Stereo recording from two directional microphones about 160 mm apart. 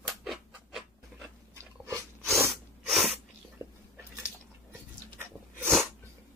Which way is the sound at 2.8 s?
Centre (ahead or behind).